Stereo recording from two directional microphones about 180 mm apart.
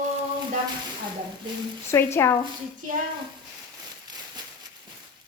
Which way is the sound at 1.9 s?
15° left (ahead or behind).